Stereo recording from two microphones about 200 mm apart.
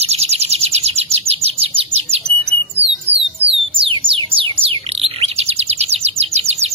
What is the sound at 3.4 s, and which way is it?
Bird, 25° right (ahead or behind).